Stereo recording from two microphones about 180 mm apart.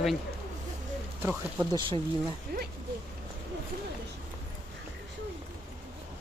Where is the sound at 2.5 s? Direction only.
55° right (ahead or behind).